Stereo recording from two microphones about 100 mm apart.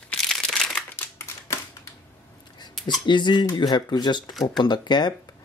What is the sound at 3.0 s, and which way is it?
Speech, 50° left (ahead or behind).